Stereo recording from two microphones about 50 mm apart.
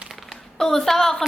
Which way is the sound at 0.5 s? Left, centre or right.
Centre.